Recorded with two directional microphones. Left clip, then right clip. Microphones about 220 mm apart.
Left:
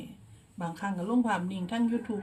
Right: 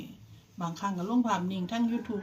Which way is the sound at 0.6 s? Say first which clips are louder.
Right 1 dB; 5° left (ahead or behind).